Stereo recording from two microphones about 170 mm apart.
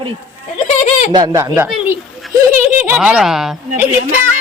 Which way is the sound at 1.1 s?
20° right (ahead or behind).